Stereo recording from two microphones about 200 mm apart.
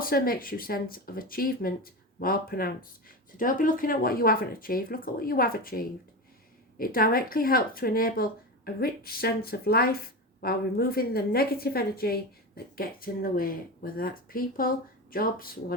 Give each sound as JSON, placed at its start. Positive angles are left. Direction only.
{"t": 0.0, "sound": "a woman's voice", "side_deg": 45}